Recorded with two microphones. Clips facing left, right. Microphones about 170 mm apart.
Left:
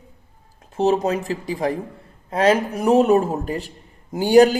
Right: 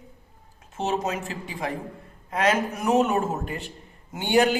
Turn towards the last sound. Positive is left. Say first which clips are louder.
# left 8 dB
turn(degrees=40)  # may be behind; listen again after turning